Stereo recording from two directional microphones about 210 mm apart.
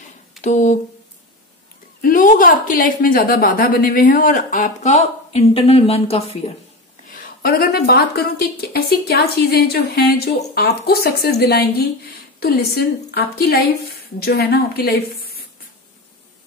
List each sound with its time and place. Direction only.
0.4 s speech: 35° left (ahead or behind)
2.0 s a woman's voice: 40° left (ahead or behind)
7.2 s a woman's voice: 45° left (ahead or behind)